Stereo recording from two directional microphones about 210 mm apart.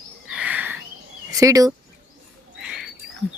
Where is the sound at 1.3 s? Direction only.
15° right (ahead or behind).